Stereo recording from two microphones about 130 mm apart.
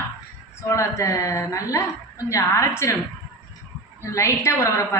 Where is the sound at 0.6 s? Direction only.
25° left (ahead or behind).